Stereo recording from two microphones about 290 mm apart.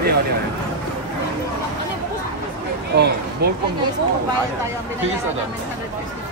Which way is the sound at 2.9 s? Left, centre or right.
Right.